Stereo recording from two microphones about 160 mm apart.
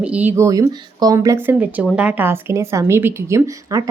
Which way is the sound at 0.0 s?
10° right (ahead or behind).